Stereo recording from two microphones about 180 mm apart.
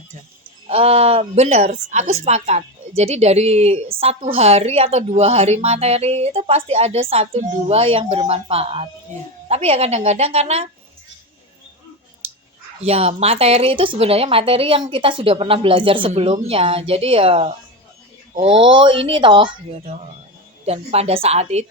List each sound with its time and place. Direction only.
0.7 s a woman's voice: 35° right (ahead or behind)
12.8 s a woman's voice: 35° right (ahead or behind)